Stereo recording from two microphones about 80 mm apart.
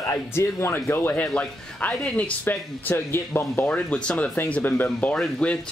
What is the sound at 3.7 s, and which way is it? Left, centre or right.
Speech, centre.